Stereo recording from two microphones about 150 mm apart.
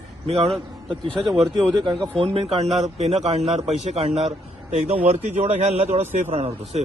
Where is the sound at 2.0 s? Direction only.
40° right (ahead or behind).